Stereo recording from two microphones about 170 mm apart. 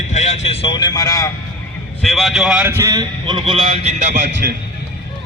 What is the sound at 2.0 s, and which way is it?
A man's voice, centre (ahead or behind).